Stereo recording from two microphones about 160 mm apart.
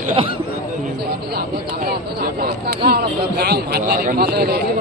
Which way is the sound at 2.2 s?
80° right.